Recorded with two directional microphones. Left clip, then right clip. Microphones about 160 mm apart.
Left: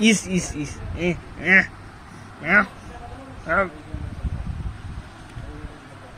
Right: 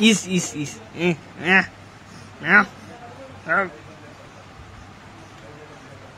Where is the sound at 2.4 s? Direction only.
40° right (ahead or behind).